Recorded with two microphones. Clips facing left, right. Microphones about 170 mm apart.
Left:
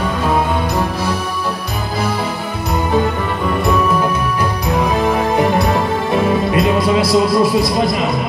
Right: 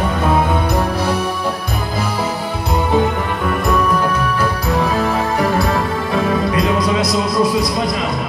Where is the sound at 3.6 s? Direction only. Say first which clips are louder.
Left 1 dB; centre (ahead or behind).